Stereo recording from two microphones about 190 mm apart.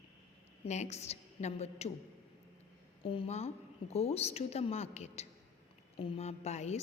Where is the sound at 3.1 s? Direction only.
30° left (ahead or behind).